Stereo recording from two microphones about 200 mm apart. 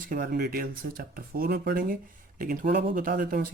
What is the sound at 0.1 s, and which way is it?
Speech, 45° right (ahead or behind).